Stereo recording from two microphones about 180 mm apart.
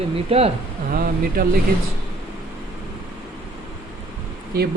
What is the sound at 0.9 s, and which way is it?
Speech, 55° right (ahead or behind).